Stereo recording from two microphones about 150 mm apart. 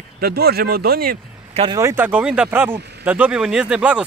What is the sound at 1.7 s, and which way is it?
Speech, 15° right (ahead or behind).